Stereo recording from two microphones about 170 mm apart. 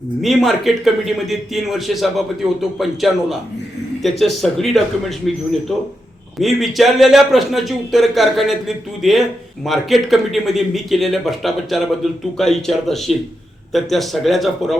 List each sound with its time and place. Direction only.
0.2 s a man's voice: centre (ahead or behind)